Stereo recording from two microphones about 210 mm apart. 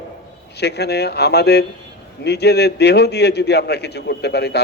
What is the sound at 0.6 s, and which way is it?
A man's voice, 50° left (ahead or behind).